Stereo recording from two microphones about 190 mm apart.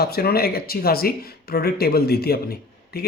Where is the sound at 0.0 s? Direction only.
55° left (ahead or behind).